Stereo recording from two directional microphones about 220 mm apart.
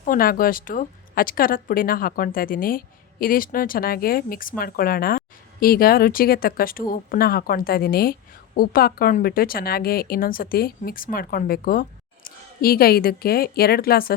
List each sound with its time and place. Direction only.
0.0 s speech: 40° left (ahead or behind)